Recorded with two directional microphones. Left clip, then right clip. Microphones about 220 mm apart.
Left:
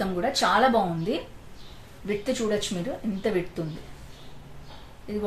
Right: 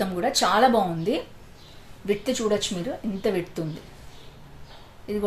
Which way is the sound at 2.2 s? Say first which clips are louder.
Even; 30° right (ahead or behind).